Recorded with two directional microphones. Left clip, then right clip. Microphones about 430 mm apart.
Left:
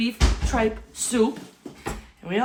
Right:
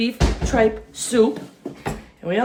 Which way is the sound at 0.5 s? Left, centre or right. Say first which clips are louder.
Right 7 dB; centre.